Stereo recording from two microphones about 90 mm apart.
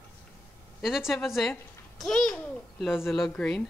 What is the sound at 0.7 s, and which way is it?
A child's voice, 5° right (ahead or behind).